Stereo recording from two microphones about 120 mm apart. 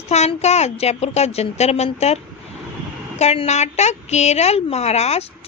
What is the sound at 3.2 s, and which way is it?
A woman's voice, 65° left (ahead or behind).